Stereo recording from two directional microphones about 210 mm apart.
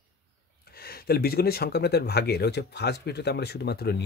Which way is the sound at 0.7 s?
45° left (ahead or behind).